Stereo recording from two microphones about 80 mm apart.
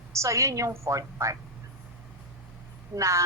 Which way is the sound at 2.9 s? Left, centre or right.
Right.